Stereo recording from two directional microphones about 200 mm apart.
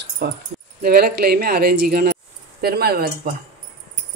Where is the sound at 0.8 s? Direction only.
50° right (ahead or behind).